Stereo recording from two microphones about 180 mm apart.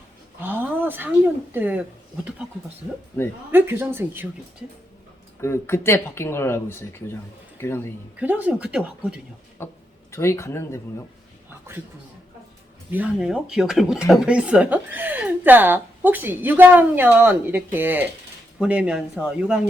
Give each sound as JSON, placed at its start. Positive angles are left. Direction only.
{"t": 0.4, "sound": "speech", "side_deg": -10}
{"t": 3.5, "sound": "speech", "side_deg": -10}
{"t": 5.4, "sound": "speech", "side_deg": 15}
{"t": 8.2, "sound": "speech", "side_deg": -10}
{"t": 9.6, "sound": "speech", "side_deg": 15}
{"t": 12.9, "sound": "speech", "side_deg": -5}